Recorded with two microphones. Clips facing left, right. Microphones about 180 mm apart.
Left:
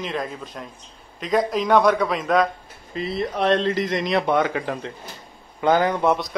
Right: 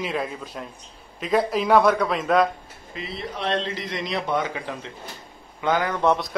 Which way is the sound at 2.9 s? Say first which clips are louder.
Left 7 dB; 45° left (ahead or behind).